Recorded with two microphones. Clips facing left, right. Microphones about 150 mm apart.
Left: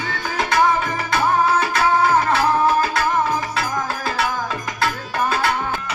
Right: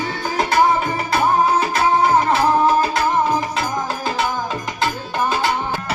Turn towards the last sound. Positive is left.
turn(degrees=-20)  # may be behind; listen again after turning